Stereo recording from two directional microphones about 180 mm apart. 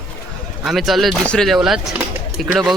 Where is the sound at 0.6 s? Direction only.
Centre (ahead or behind).